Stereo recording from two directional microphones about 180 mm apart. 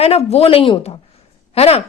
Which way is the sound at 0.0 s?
35° left (ahead or behind).